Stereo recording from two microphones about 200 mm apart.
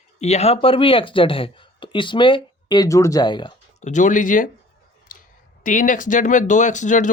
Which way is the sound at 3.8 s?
40° left (ahead or behind).